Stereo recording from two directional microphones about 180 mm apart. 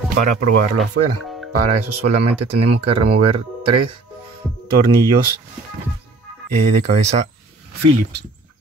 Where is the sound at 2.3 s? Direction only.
35° right (ahead or behind).